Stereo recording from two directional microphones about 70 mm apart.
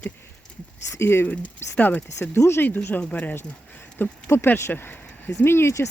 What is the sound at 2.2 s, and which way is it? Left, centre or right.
Speech, left.